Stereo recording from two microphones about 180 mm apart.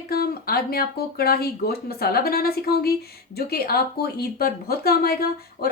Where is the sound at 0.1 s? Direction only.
60° left (ahead or behind).